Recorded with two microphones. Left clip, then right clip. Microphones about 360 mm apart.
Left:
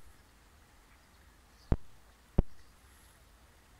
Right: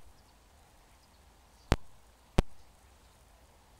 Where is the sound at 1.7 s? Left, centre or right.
Right.